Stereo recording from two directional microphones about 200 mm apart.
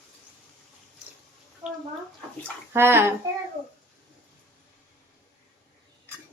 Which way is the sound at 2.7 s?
10° right (ahead or behind).